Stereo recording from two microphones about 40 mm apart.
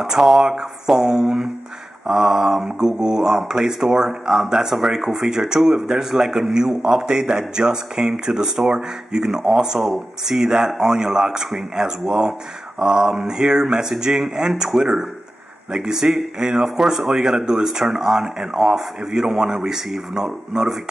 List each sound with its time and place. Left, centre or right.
0.0 s speech: centre